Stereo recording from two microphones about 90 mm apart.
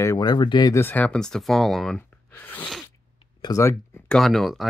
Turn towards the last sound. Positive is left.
turn(degrees=0)  # may be behind; listen again after turning